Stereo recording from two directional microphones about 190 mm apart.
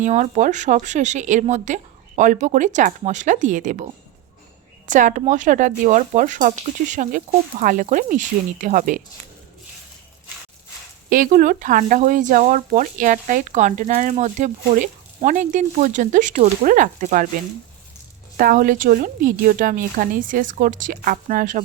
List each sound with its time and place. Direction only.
0.0 s speech: 40° right (ahead or behind)
4.9 s speech: 40° right (ahead or behind)
11.1 s speech: 45° right (ahead or behind)
18.3 s speech: 45° right (ahead or behind)